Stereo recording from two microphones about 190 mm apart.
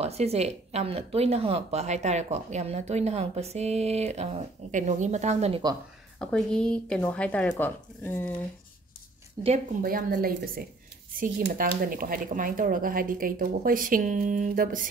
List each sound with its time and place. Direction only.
0.0 s a woman's voice: 35° right (ahead or behind)
6.1 s a woman's voice: 5° left (ahead or behind)
9.4 s speech: 20° right (ahead or behind)
9.8 s speech: 45° right (ahead or behind)